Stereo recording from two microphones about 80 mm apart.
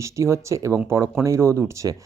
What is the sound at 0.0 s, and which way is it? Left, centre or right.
Speech, right.